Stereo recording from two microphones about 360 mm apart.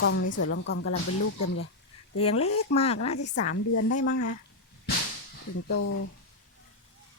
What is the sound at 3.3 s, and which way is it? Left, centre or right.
Speech, left.